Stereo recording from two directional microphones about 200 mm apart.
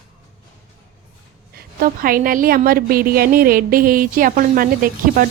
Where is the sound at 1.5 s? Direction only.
45° right (ahead or behind).